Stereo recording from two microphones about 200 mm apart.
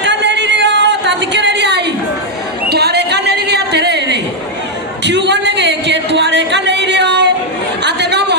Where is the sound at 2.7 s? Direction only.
55° right (ahead or behind).